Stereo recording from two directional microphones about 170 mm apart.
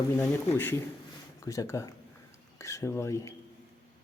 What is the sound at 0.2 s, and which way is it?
Speech, 15° left (ahead or behind).